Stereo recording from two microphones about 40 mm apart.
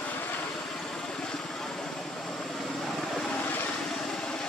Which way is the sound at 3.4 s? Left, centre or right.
Left.